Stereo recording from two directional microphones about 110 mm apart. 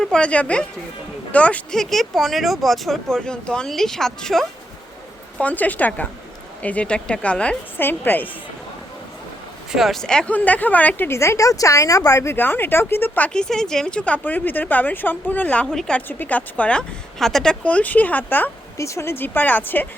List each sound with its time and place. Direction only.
0.0 s speech: 10° left (ahead or behind)
5.4 s speech: 15° left (ahead or behind)
9.7 s speech: centre (ahead or behind); by 19.9 s 15° left (ahead or behind)